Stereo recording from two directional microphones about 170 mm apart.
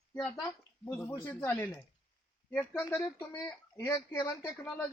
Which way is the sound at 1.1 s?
15° left (ahead or behind).